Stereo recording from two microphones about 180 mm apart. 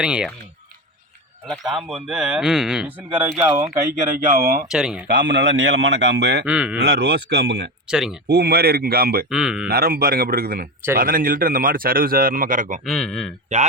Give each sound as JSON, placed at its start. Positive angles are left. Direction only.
{"t": 0.0, "sound": "speech", "side_deg": -5}
{"t": 1.5, "sound": "speech", "side_deg": 0}
{"t": 4.0, "sound": "a man's voice", "side_deg": -50}
{"t": 4.7, "sound": "speech", "side_deg": -5}
{"t": 5.0, "sound": "speech", "side_deg": -75}
{"t": 6.4, "sound": "speech", "side_deg": -5}
{"t": 6.7, "sound": "speech", "side_deg": -65}
{"t": 7.9, "sound": "speech", "side_deg": -5}
{"t": 8.3, "sound": "a man's voice", "side_deg": -65}
{"t": 9.3, "sound": "speech", "side_deg": -5}
{"t": 9.6, "sound": "a man's voice", "side_deg": -55}
{"t": 12.8, "sound": "speech", "side_deg": 0}